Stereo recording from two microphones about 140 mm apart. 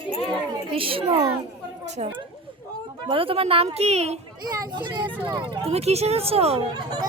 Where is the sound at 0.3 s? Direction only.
40° right (ahead or behind).